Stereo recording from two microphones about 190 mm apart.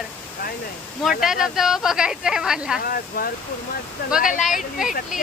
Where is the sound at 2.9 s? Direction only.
50° left (ahead or behind).